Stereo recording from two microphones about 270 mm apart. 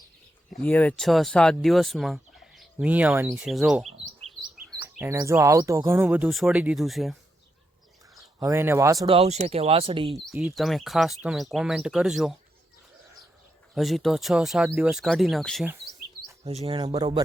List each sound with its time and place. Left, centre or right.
0.5 s speech: centre
4.9 s speech: centre
8.4 s speech: centre
10.1 s speech: centre
13.7 s speech: centre
16.4 s speech: right